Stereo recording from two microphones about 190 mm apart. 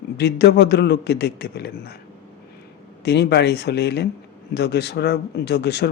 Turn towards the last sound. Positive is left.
turn(degrees=60)  # may be behind; listen again after turning